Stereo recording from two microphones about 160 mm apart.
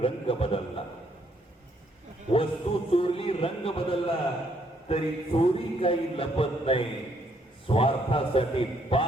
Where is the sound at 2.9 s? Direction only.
35° left (ahead or behind).